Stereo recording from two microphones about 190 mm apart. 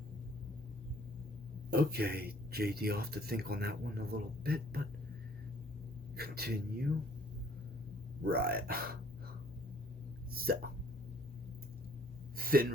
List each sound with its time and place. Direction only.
1.7 s speech: 55° right (ahead or behind)
6.1 s speech: 55° right (ahead or behind)
8.3 s speech: 55° right (ahead or behind)
10.3 s hiccup: 50° right (ahead or behind)
12.4 s a sound: 50° right (ahead or behind)